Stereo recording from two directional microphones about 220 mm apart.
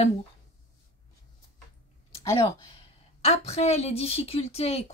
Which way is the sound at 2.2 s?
15° left (ahead or behind).